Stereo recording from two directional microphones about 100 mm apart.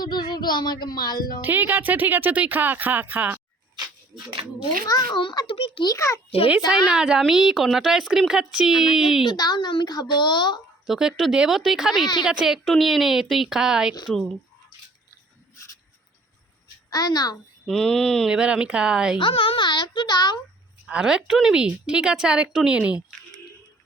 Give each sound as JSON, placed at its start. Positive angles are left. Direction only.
{"t": 0.0, "sound": "a woman's voice", "side_deg": 45}
{"t": 1.4, "sound": "speech", "side_deg": -20}
{"t": 4.1, "sound": "speech", "side_deg": -65}
{"t": 5.1, "sound": "a woman's voice", "side_deg": 45}
{"t": 5.5, "sound": "a child's voice", "side_deg": 70}
{"t": 6.8, "sound": "a woman's voice", "side_deg": -5}
{"t": 9.2, "sound": "a woman's voice", "side_deg": 45}
{"t": 10.8, "sound": "a woman's voice", "side_deg": -5}
{"t": 16.9, "sound": "a child's voice", "side_deg": 40}
{"t": 17.7, "sound": "a woman's voice", "side_deg": 5}
{"t": 18.3, "sound": "a woman's voice", "side_deg": -10}
{"t": 19.3, "sound": "a woman's voice", "side_deg": 60}
{"t": 20.8, "sound": "a woman's voice", "side_deg": -5}